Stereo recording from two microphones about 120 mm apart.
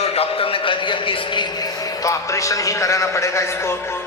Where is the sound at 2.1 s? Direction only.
25° left (ahead or behind).